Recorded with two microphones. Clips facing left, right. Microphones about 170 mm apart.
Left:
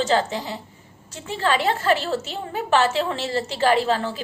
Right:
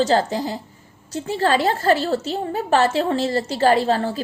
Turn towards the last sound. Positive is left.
turn(degrees=-40)  # may be behind; listen again after turning